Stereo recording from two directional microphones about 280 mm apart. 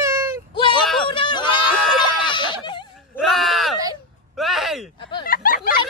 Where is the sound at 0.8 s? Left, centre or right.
Centre.